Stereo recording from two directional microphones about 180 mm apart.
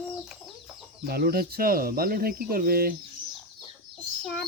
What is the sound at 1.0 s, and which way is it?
Speech, 60° right (ahead or behind).